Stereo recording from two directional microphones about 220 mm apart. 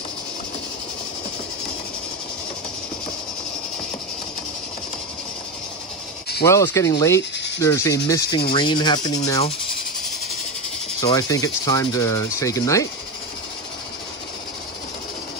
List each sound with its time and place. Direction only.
6.4 s speech: 15° left (ahead or behind)
11.0 s speech: 15° left (ahead or behind)